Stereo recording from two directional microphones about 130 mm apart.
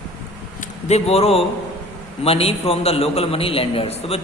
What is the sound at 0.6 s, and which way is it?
Speech, 55° left (ahead or behind).